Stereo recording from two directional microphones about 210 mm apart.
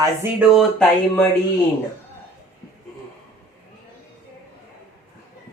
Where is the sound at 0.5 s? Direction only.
Centre (ahead or behind).